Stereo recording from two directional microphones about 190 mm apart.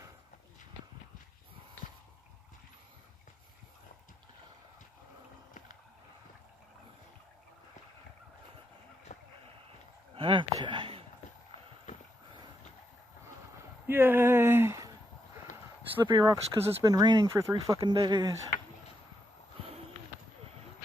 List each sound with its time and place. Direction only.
9.1 s a sound: 45° left (ahead or behind)
10.1 s speech: 25° right (ahead or behind)
13.8 s speech: 10° right (ahead or behind)
16.1 s speech: 20° right (ahead or behind)